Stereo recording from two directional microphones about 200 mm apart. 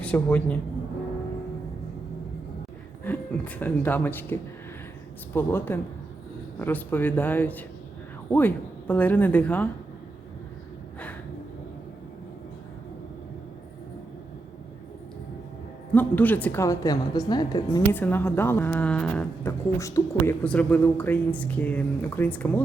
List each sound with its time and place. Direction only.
0.0 s a man's voice: 5° left (ahead or behind)
3.0 s a woman's voice: 10° left (ahead or behind)
16.0 s a woman's voice: 10° left (ahead or behind)
17.9 s a woman's voice: 10° left (ahead or behind)